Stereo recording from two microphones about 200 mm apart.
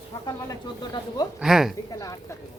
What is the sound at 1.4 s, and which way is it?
Speech, 5° right (ahead or behind).